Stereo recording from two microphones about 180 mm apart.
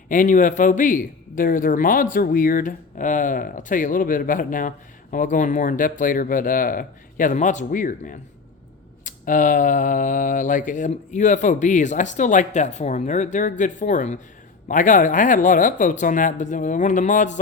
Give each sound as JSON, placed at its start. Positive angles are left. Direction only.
{"t": 0.1, "sound": "speech", "side_deg": 45}